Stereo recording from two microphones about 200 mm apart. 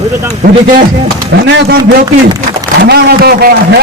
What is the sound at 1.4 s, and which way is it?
Speech, 60° right (ahead or behind).